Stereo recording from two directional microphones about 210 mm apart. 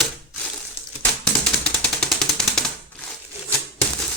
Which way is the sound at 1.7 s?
5° left (ahead or behind).